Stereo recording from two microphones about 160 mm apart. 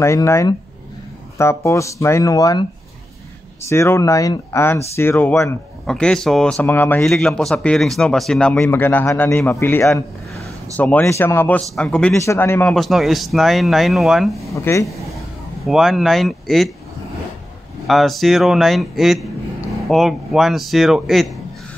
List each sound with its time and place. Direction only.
0.0 s speech: 15° left (ahead or behind)
3.6 s speech: 15° left (ahead or behind)
12.1 s speech: 15° left (ahead or behind)
12.7 s speech: centre (ahead or behind)
14.5 s speech: 20° left (ahead or behind)
14.9 s speech: centre (ahead or behind)
17.8 s speech: centre (ahead or behind)